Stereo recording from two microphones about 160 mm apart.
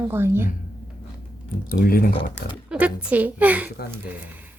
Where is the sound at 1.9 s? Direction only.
65° left (ahead or behind).